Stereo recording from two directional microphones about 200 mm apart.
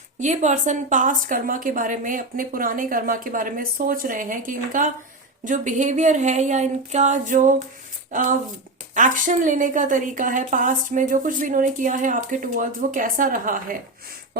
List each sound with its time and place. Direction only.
0.2 s a woman's voice: 35° right (ahead or behind)